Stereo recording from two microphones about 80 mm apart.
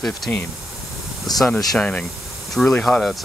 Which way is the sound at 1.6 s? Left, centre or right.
Centre.